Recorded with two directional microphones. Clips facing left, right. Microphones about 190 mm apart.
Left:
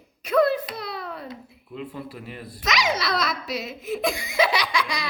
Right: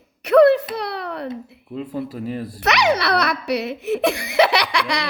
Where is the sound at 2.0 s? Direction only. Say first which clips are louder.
Right 10 dB; 40° right (ahead or behind).